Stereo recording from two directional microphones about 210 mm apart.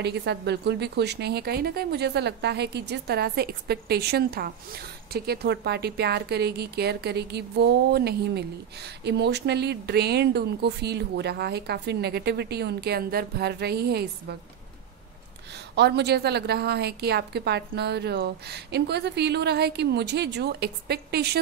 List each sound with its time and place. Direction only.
0.0 s a woman's voice: 55° right (ahead or behind)
15.7 s a woman's voice: 50° right (ahead or behind)